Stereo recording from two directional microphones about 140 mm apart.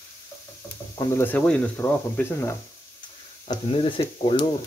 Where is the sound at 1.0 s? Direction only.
20° left (ahead or behind).